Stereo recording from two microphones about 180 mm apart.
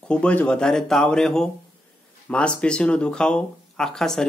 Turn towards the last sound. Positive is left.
turn(degrees=5)  # may be behind; listen again after turning